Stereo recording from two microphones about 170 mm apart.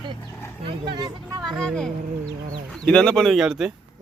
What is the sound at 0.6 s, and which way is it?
Speech, 30° right (ahead or behind).